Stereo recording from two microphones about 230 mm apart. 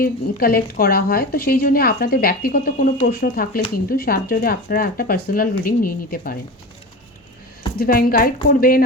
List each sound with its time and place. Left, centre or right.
0.0 s a woman's voice: left
7.8 s a woman's voice: left